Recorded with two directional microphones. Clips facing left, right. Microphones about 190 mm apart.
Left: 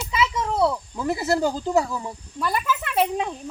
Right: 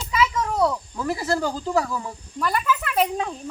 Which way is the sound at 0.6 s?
10° left (ahead or behind).